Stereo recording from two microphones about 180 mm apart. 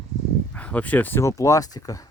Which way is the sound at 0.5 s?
5° left (ahead or behind).